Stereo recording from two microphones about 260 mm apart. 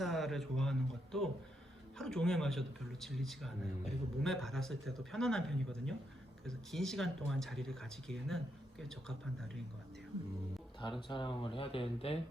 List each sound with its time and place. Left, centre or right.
0.0 s a man's voice: centre
10.8 s speech: centre